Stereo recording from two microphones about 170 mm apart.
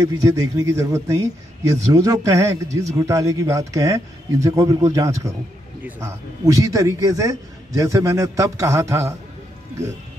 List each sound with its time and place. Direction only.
0.0 s speech: 20° right (ahead or behind)